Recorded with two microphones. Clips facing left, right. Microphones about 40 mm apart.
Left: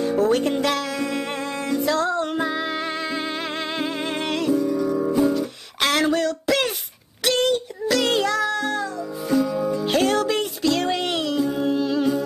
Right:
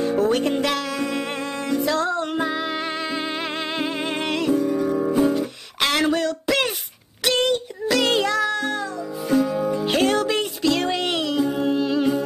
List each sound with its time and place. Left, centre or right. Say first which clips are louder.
0.0 s music: even; centre
4.5 s music: even; right
5.8 s a sound: even; centre
7.2 s music: even; centre
9.3 s music: right 1 dB; right
9.8 s music: even; centre
11.3 s music: right 1 dB; right
11.6 s music: right 1 dB; centre